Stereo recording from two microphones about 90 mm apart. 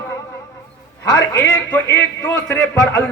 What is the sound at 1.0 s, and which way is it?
Speech, 45° left (ahead or behind).